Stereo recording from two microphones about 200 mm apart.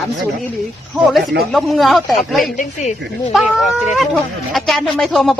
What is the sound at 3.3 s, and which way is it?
Speech, centre (ahead or behind).